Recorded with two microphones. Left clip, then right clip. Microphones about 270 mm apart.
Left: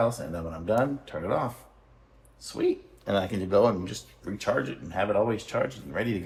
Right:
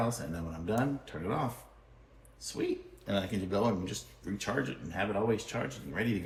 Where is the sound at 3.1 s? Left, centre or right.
Centre.